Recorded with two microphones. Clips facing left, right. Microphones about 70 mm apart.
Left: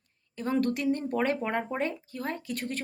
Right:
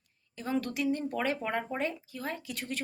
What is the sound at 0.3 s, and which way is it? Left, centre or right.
A woman's voice, left.